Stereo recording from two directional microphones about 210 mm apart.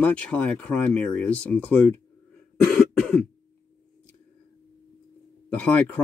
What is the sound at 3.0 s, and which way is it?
Throat clearing, 5° left (ahead or behind).